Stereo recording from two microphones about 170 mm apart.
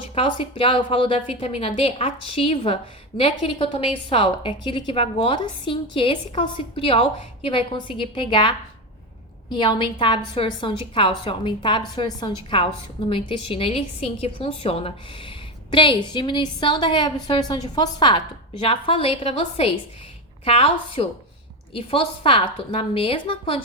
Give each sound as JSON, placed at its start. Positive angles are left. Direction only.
{"t": 0.1, "sound": "a woman's voice", "side_deg": 30}